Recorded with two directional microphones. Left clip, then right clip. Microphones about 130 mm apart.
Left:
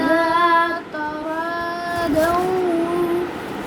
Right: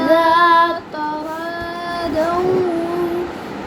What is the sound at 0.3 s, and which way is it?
Child singing, 40° right (ahead or behind).